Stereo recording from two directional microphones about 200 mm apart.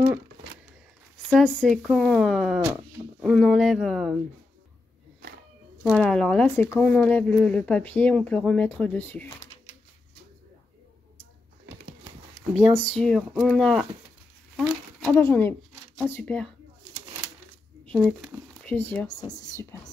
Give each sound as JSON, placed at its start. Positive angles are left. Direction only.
{"t": 1.3, "sound": "speech", "side_deg": 5}
{"t": 5.9, "sound": "speech", "side_deg": 5}
{"t": 12.4, "sound": "speech", "side_deg": 5}
{"t": 15.0, "sound": "speech", "side_deg": 10}
{"t": 17.9, "sound": "speech", "side_deg": 0}